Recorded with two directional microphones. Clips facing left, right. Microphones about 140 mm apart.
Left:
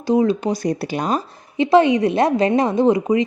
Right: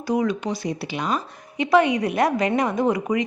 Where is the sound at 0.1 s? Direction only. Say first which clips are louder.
Left 6 dB; 30° left (ahead or behind).